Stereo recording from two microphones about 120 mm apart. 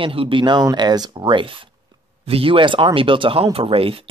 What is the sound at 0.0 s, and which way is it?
Speech, 50° right (ahead or behind).